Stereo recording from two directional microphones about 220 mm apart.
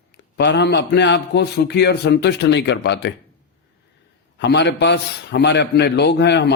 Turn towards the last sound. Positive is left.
turn(degrees=50)  # may be behind; listen again after turning